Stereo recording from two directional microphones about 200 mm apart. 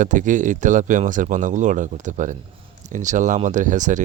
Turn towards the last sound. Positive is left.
turn(degrees=-40)  # may be behind; listen again after turning